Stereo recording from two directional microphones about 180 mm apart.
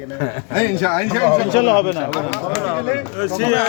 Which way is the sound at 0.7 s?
10° left (ahead or behind).